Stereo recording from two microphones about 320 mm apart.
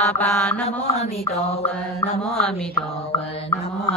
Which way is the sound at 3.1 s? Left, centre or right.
Centre.